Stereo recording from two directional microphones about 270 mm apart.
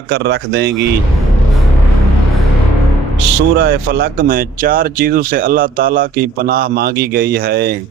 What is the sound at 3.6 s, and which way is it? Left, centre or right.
Speech, right.